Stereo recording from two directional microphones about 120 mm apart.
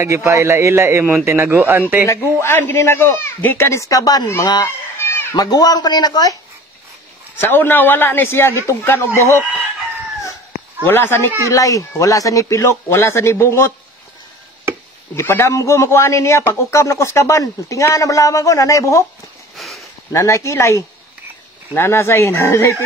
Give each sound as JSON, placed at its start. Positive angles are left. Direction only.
{"t": 0.0, "sound": "a man's voice", "side_deg": -25}
{"t": 2.0, "sound": "a man's voice", "side_deg": 20}
{"t": 4.6, "sound": "a sound", "side_deg": 20}
{"t": 5.4, "sound": "a man's voice", "side_deg": 30}
{"t": 7.3, "sound": "a man's voice", "side_deg": 20}
{"t": 10.9, "sound": "a man's voice", "side_deg": 20}
{"t": 15.1, "sound": "a man's voice", "side_deg": 20}
{"t": 19.5, "sound": "a sound", "side_deg": 0}
{"t": 20.1, "sound": "a man's voice", "side_deg": 25}